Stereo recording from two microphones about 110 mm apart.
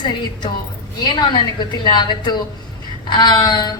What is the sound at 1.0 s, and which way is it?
A woman's voice, 40° left (ahead or behind).